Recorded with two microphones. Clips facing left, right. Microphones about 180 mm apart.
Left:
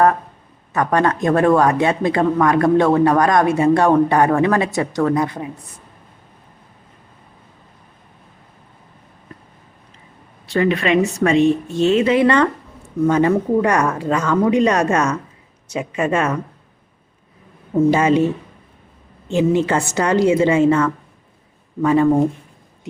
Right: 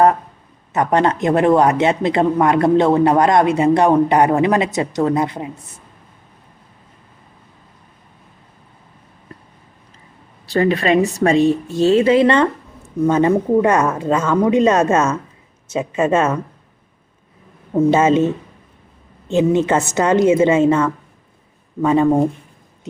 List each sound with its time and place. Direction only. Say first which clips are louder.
0.7 s speech: right 1 dB; 20° right (ahead or behind)
10.4 s speech: right 1 dB; 35° right (ahead or behind)
17.9 s speech: right 3 dB; 20° right (ahead or behind)
19.3 s speech: right 2 dB; 20° right (ahead or behind)